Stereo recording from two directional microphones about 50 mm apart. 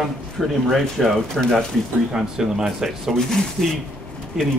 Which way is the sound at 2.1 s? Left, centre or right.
Centre.